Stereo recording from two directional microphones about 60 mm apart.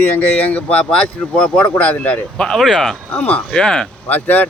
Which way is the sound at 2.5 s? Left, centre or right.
Centre.